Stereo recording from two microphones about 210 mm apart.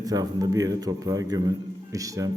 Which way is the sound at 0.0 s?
20° right (ahead or behind).